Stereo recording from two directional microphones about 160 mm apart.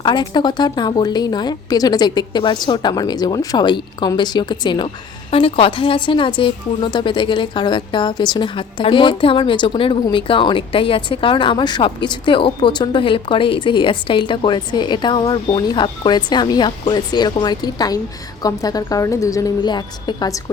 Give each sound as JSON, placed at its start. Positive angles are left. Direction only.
{"t": 0.0, "sound": "speech", "side_deg": 30}